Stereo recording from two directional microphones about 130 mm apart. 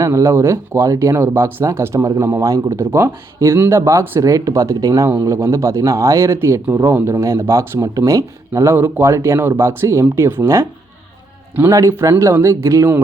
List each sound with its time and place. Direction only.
0.0 s speech: 25° right (ahead or behind)
11.7 s speech: 20° right (ahead or behind)